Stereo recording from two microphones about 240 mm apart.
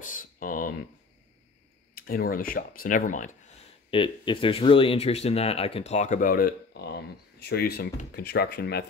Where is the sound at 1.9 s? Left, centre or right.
Left.